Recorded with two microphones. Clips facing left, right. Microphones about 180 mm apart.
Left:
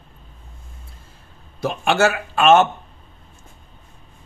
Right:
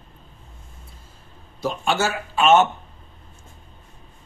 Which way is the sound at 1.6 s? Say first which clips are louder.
Left 5 dB; 70° left (ahead or behind).